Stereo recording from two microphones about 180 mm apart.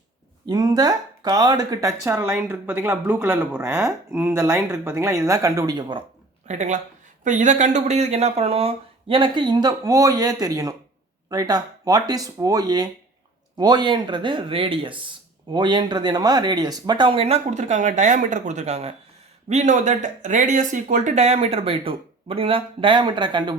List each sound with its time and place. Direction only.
0.4 s speech: 20° right (ahead or behind)
6.5 s speech: 40° right (ahead or behind); by 23.6 s 25° right (ahead or behind)